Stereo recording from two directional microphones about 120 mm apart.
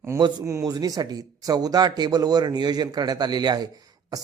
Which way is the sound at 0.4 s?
25° right (ahead or behind).